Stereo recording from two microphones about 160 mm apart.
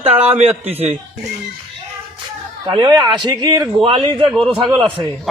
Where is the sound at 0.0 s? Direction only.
40° right (ahead or behind).